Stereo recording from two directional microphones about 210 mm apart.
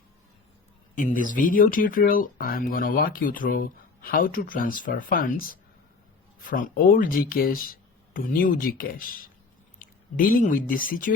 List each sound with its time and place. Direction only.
0.9 s speech: 40° left (ahead or behind)